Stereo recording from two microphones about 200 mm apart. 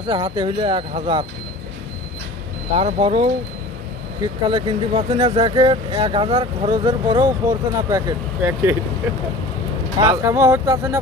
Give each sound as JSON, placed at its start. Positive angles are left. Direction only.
{"t": 0.0, "sound": "speech", "side_deg": -25}
{"t": 2.7, "sound": "speech", "side_deg": -30}
{"t": 8.4, "sound": "speech", "side_deg": -10}
{"t": 10.0, "sound": "speech", "side_deg": -15}